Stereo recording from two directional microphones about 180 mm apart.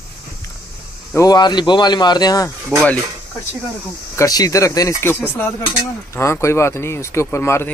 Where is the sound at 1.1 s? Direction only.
20° left (ahead or behind).